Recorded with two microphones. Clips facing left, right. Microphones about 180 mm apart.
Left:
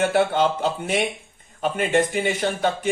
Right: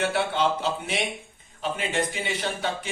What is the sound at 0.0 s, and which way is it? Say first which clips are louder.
Speech: left 5 dB; 50° left (ahead or behind).